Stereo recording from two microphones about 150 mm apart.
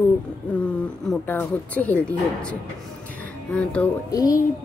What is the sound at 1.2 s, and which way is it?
Speech, 15° left (ahead or behind).